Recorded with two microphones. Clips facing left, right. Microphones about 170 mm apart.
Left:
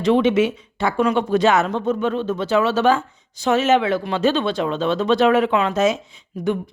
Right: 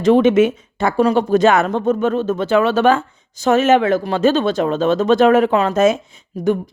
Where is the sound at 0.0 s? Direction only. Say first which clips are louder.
Right 4 dB; 45° right (ahead or behind).